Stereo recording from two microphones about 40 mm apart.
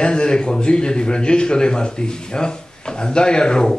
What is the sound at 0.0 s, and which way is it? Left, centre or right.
Speech, left.